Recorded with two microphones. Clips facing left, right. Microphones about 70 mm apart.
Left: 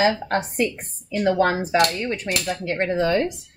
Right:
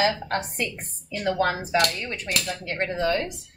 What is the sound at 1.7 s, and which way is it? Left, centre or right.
Speech, centre.